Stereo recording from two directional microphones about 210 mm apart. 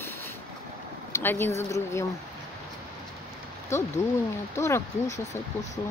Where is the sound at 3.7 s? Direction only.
15° left (ahead or behind).